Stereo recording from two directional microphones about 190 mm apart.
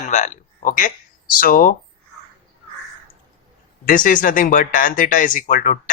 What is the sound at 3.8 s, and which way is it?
Speech, 45° left (ahead or behind).